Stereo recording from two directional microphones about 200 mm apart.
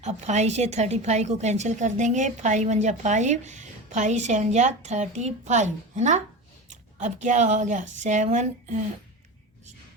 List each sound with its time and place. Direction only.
0.0 s a woman's voice: 35° right (ahead or behind)